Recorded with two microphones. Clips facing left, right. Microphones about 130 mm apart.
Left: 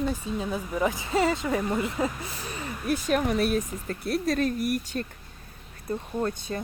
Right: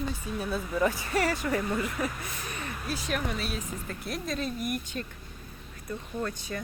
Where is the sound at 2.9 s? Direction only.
45° left (ahead or behind).